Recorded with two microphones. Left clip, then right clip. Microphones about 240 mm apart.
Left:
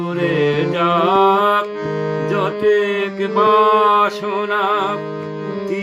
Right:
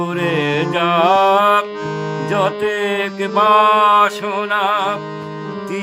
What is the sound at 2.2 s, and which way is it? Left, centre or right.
Music, right.